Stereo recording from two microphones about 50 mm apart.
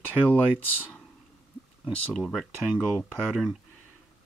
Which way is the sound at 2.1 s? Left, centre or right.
Centre.